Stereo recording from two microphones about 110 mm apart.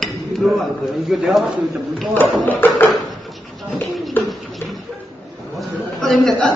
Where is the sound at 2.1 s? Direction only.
15° left (ahead or behind).